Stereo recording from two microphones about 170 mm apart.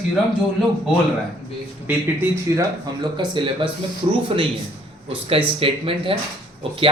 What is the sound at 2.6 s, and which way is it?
Speech, 25° right (ahead or behind).